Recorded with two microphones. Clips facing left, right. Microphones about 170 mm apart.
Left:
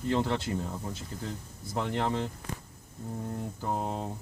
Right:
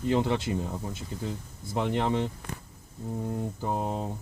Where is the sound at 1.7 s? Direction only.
15° right (ahead or behind).